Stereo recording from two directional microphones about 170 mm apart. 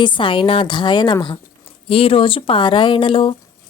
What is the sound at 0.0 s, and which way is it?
A woman's voice, 30° left (ahead or behind).